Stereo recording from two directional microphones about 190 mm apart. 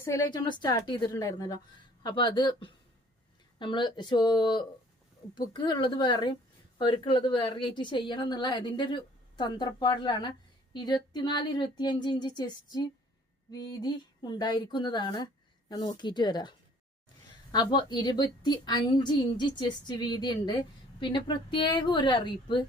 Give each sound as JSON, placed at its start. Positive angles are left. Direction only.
{"t": 0.0, "sound": "a woman's voice", "side_deg": 15}